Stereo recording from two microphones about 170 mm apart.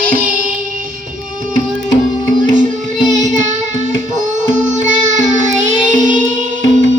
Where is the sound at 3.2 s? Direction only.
45° right (ahead or behind).